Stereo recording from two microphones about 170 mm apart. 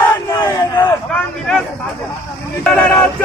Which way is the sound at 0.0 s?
15° left (ahead or behind).